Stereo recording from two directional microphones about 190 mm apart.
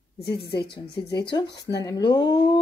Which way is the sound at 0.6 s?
60° left (ahead or behind).